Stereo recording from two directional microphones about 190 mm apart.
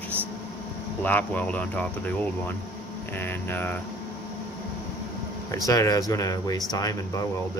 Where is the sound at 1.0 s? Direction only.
10° left (ahead or behind).